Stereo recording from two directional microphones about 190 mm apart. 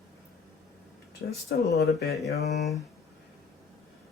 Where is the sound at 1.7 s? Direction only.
60° left (ahead or behind).